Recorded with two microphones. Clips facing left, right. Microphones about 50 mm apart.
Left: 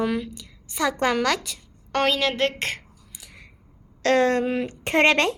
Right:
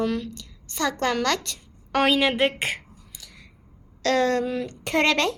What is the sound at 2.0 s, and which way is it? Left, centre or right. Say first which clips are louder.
Speech: right 2 dB; centre.